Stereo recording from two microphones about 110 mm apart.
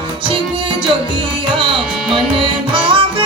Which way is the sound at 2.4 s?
50° right (ahead or behind).